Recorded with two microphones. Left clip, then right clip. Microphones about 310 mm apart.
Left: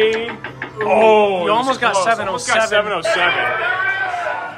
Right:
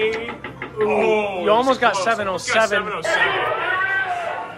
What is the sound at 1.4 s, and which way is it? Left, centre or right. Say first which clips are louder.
A man's voice: even; centre.